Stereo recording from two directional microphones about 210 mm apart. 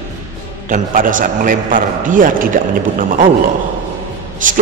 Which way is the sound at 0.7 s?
40° right (ahead or behind).